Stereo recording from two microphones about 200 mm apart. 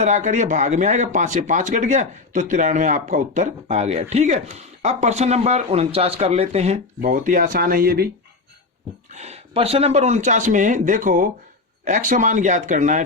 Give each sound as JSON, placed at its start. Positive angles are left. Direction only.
{"t": 0.0, "sound": "speech", "side_deg": -35}
{"t": 9.1, "sound": "speech", "side_deg": -35}